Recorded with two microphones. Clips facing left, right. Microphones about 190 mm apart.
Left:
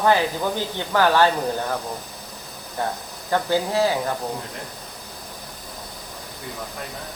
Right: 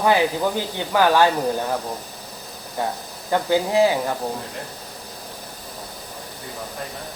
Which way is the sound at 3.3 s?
15° right (ahead or behind).